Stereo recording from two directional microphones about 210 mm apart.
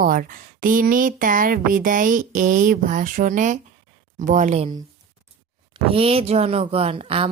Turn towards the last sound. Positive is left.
turn(degrees=-25)  # may be behind; listen again after turning